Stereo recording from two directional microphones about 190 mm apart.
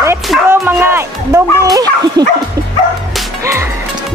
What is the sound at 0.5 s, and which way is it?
Bow-wow, 10° right (ahead or behind).